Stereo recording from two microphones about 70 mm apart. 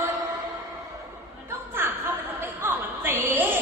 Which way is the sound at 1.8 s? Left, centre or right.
Right.